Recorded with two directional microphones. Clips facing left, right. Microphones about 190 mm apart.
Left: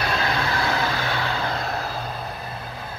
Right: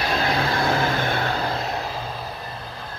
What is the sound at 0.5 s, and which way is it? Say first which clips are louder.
Vehicle: right 3 dB; 50° right (ahead or behind).